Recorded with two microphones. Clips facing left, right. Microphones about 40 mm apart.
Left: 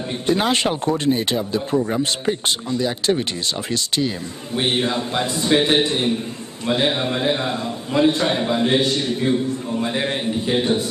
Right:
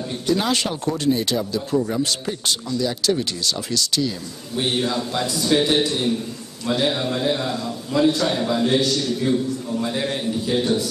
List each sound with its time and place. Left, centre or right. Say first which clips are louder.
0.3 s a man's voice: left 2 dB; left